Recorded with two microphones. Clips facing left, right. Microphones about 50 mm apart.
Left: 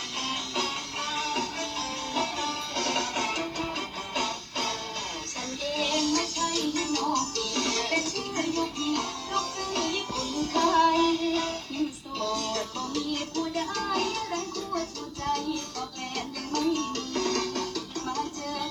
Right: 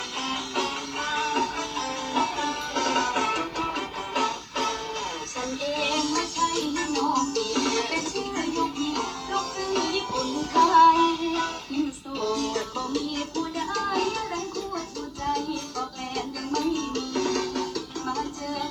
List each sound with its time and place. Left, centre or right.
0.3 s music: right
12.9 s music: left
13.1 s music: right
16.6 s music: right